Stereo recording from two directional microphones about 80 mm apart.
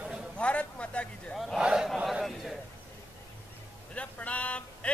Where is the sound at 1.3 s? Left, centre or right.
Centre.